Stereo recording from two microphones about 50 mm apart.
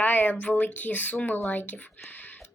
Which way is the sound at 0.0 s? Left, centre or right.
Left.